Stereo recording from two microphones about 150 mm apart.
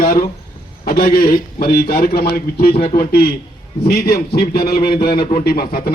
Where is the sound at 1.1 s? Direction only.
90° left.